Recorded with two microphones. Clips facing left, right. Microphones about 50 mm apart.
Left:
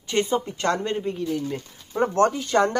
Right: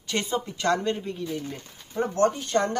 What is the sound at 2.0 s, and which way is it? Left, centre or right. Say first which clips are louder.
Speech: left 3 dB; left.